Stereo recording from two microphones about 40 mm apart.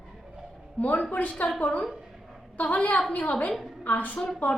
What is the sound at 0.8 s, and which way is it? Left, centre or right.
Speech, left.